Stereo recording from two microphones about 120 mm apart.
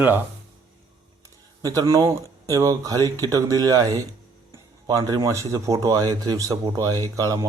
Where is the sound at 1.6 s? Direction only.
30° right (ahead or behind).